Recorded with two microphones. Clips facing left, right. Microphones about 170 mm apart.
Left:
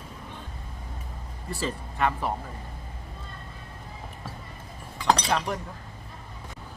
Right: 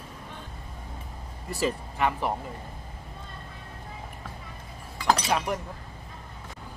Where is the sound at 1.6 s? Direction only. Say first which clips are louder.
Right 1 dB; 10° right (ahead or behind).